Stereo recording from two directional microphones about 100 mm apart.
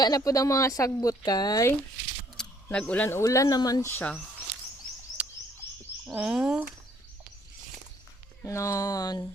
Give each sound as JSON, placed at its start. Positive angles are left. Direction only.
{"t": 0.0, "sound": "speech", "side_deg": 35}
{"t": 2.4, "sound": "a sound", "side_deg": 5}
{"t": 2.7, "sound": "speech", "side_deg": 15}
{"t": 3.1, "sound": "speech", "side_deg": 30}
{"t": 3.8, "sound": "speech", "side_deg": 20}
{"t": 6.1, "sound": "speech", "side_deg": -10}
{"t": 8.4, "sound": "speech", "side_deg": 30}